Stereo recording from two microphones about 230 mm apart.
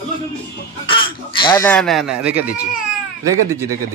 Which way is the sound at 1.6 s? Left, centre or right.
Centre.